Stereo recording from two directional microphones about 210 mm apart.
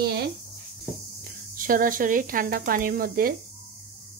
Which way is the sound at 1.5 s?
40° right (ahead or behind).